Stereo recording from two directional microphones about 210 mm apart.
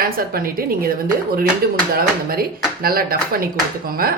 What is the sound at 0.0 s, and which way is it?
Speech, 45° right (ahead or behind).